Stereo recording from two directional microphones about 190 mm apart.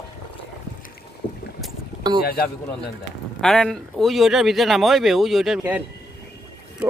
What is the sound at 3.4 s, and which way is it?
Speech, centre (ahead or behind).